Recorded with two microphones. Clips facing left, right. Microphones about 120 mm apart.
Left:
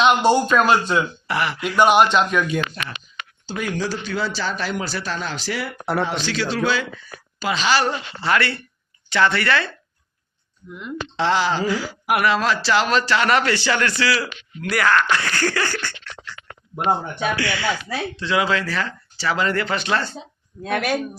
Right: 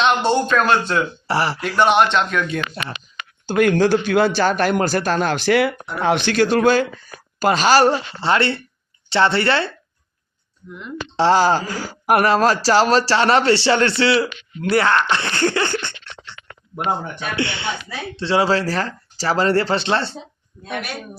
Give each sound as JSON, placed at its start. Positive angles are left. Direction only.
{"t": 0.3, "sound": "speech", "side_deg": 5}
{"t": 1.3, "sound": "speech", "side_deg": -35}
{"t": 1.6, "sound": "speech", "side_deg": 5}
{"t": 2.4, "sound": "speech", "side_deg": -30}
{"t": 3.4, "sound": "a man's voice", "side_deg": -60}
{"t": 11.2, "sound": "speech", "side_deg": -40}
{"t": 20.6, "sound": "speech", "side_deg": 90}